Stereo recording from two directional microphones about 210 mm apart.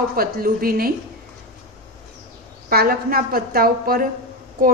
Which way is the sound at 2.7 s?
45° right (ahead or behind).